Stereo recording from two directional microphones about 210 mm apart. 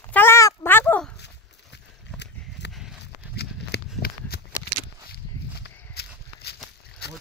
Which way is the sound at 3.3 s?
50° left (ahead or behind).